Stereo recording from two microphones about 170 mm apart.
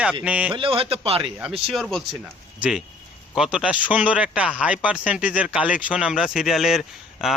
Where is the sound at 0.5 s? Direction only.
30° right (ahead or behind).